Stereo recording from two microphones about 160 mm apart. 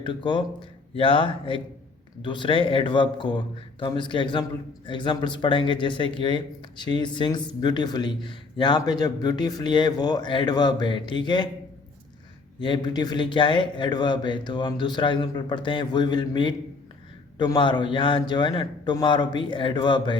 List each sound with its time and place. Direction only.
0.0 s speech: 30° left (ahead or behind)
12.5 s speech: 30° left (ahead or behind)